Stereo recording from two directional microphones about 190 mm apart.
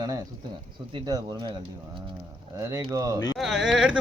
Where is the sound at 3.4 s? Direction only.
Centre (ahead or behind).